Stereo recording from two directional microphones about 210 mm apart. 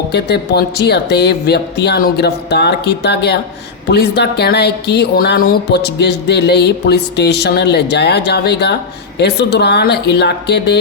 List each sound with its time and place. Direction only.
0.1 s a woman's voice: 50° left (ahead or behind)